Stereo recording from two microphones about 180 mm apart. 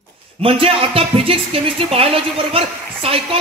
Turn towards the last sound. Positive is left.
turn(degrees=-30)  # may be behind; listen again after turning